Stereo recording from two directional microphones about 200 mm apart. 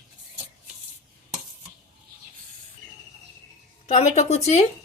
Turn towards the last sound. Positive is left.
turn(degrees=35)  # may be behind; listen again after turning